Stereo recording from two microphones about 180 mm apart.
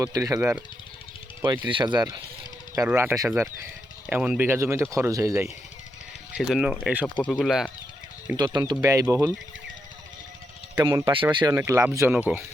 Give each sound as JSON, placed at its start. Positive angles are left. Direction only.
{"t": 0.0, "sound": "speech", "side_deg": -20}
{"t": 1.6, "sound": "speech", "side_deg": -25}
{"t": 2.8, "sound": "speech", "side_deg": -10}
{"t": 6.3, "sound": "speech", "side_deg": 0}
{"t": 8.5, "sound": "speech", "side_deg": -20}
{"t": 10.8, "sound": "speech", "side_deg": -20}
{"t": 11.5, "sound": "speech", "side_deg": -15}